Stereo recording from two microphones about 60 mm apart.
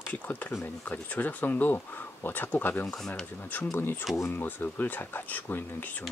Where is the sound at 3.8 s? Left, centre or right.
Left.